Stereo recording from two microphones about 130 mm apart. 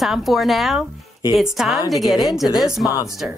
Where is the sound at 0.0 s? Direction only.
Centre (ahead or behind).